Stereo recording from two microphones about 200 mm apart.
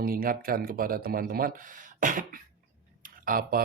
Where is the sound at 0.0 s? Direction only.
45° right (ahead or behind).